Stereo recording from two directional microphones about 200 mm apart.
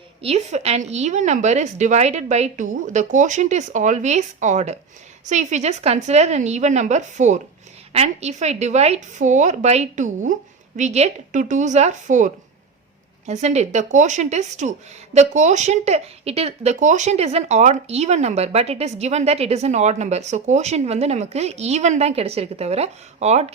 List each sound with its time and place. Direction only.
0.2 s speech: 30° right (ahead or behind)